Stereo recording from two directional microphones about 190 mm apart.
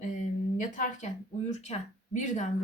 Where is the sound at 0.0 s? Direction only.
45° left (ahead or behind).